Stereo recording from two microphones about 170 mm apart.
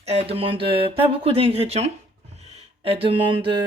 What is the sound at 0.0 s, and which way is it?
Speech, 35° right (ahead or behind).